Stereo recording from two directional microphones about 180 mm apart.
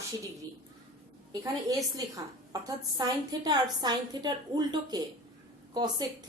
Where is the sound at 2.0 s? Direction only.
20° right (ahead or behind).